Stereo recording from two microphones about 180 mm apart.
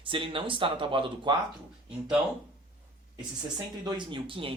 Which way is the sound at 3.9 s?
25° right (ahead or behind).